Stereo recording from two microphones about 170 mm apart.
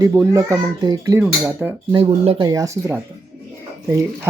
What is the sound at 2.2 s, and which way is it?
A child's voice, 25° right (ahead or behind).